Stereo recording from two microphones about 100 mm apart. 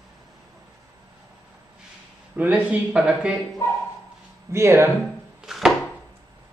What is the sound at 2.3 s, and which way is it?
Speech, 15° right (ahead or behind).